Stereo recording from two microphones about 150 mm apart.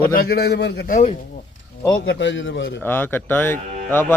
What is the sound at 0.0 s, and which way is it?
A man's voice, 80° left.